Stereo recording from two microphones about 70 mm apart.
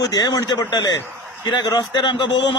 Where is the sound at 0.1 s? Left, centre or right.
Left.